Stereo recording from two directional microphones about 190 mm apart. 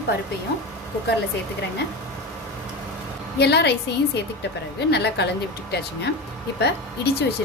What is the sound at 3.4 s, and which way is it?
Speech, 60° left (ahead or behind).